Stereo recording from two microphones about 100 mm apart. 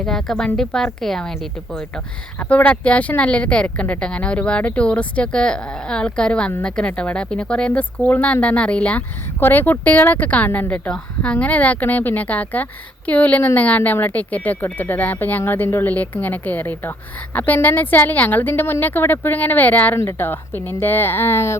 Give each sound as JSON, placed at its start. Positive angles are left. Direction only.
{"t": 0.0, "sound": "speech", "side_deg": 5}
{"t": 2.4, "sound": "a woman's voice", "side_deg": 15}